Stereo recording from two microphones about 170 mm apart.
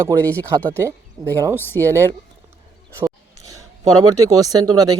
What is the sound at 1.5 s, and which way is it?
Speech, 10° left (ahead or behind).